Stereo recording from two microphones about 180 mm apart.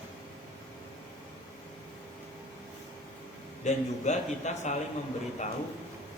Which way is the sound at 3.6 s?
40° left (ahead or behind).